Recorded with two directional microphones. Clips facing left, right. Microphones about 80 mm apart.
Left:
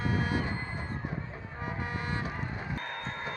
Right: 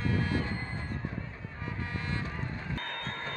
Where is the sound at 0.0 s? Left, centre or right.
Centre.